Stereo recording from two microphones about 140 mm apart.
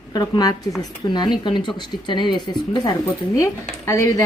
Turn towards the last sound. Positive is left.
turn(degrees=25)  # may be behind; listen again after turning